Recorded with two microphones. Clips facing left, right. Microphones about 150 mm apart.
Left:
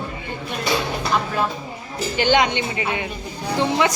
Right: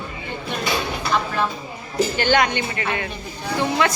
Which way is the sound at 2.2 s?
20° left (ahead or behind).